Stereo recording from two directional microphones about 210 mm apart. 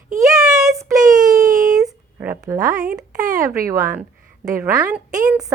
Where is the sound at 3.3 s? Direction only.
15° right (ahead or behind).